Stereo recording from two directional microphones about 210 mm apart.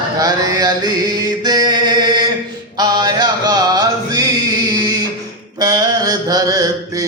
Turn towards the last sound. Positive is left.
turn(degrees=-20)  # may be behind; listen again after turning